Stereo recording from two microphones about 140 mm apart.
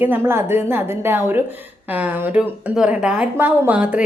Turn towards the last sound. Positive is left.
turn(degrees=-10)  # may be behind; listen again after turning